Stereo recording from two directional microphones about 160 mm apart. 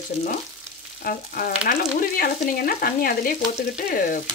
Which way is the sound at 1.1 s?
65° left (ahead or behind).